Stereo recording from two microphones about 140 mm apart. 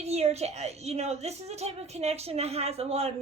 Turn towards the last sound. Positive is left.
turn(degrees=-45)  # may be behind; listen again after turning